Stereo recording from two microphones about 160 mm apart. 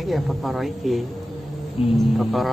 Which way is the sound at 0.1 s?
Centre (ahead or behind).